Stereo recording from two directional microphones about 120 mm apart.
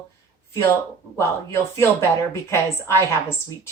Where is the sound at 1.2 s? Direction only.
20° left (ahead or behind).